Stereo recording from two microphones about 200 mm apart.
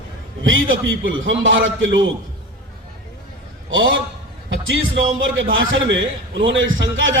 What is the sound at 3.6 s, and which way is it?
A man's voice, 70° right (ahead or behind).